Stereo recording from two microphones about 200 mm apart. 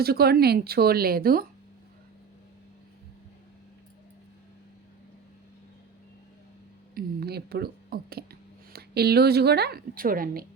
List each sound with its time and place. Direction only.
0.0 s speech: 50° right (ahead or behind)
6.9 s speech: 50° right (ahead or behind)